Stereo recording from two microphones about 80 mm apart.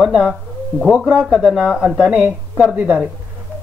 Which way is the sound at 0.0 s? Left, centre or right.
Centre.